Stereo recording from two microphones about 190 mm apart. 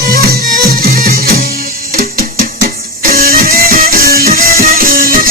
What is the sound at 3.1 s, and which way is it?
Music, 50° right (ahead or behind).